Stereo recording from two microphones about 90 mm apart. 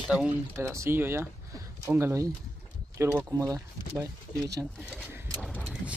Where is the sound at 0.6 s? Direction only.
30° right (ahead or behind).